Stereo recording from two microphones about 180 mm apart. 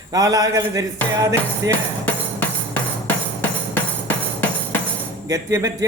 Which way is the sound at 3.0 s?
10° left (ahead or behind).